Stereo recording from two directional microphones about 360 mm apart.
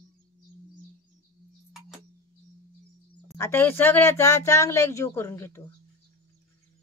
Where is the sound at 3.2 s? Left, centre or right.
Centre.